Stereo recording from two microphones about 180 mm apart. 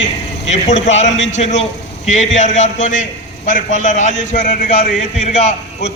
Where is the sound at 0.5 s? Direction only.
40° left (ahead or behind).